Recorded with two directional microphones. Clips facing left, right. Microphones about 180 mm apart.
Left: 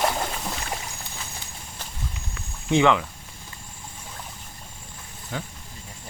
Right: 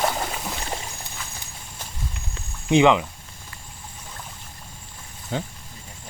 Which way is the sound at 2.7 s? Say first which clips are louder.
Right 3 dB; 15° right (ahead or behind).